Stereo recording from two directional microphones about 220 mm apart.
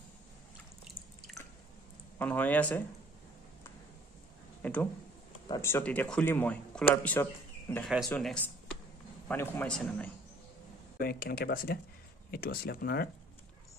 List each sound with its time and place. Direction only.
2.1 s speech: 10° left (ahead or behind)
4.6 s speech: 5° left (ahead or behind)
11.0 s speech: 45° left (ahead or behind)